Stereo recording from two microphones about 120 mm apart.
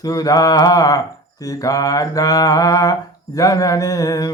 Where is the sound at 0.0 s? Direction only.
30° left (ahead or behind).